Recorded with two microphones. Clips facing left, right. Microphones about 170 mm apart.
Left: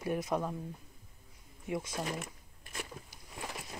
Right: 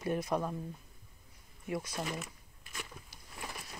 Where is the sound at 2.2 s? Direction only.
45° left (ahead or behind).